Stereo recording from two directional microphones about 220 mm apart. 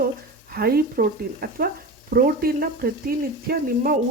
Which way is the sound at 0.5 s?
45° right (ahead or behind).